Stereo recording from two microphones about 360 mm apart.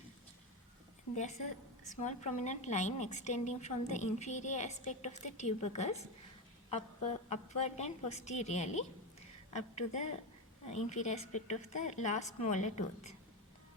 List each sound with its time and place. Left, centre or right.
1.1 s a woman's voice: centre